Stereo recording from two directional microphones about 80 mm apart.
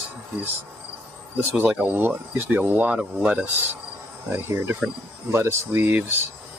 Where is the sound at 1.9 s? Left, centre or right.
Right.